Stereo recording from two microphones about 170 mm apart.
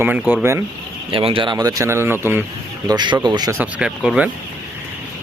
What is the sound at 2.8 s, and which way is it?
Speech, 25° right (ahead or behind).